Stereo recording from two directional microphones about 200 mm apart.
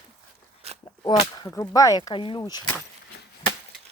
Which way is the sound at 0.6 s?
30° right (ahead or behind).